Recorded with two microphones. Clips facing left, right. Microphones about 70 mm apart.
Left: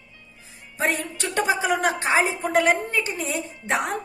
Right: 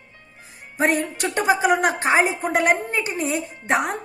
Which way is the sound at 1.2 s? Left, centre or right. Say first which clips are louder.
Right 2 dB; right.